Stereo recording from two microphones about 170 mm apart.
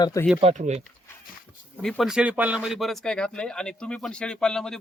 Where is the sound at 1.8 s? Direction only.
Centre (ahead or behind).